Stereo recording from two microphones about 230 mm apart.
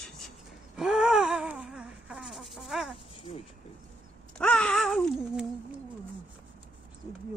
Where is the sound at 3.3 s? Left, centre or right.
Left.